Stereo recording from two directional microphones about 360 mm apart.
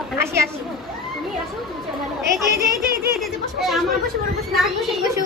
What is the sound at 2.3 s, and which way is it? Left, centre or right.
Speech, right.